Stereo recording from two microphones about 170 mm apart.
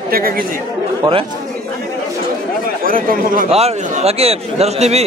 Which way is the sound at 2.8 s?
55° right (ahead or behind).